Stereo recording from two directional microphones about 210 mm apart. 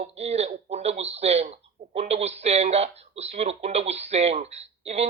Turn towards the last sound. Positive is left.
turn(degrees=-30)  # may be behind; listen again after turning